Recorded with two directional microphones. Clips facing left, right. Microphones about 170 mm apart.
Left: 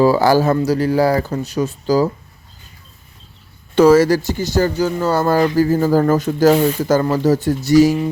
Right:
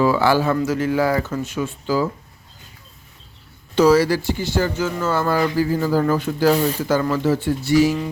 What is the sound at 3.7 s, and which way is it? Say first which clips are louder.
Speech: left 4 dB; 50° left (ahead or behind).